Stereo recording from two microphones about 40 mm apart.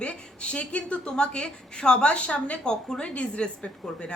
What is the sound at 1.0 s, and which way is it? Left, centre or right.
A woman's voice, left.